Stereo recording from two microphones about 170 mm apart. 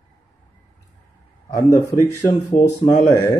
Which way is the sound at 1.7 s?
15° left (ahead or behind).